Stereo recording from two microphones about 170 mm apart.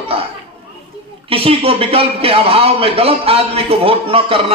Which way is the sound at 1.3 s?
35° right (ahead or behind).